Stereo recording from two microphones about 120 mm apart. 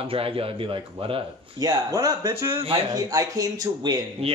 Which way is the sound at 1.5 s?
30° right (ahead or behind).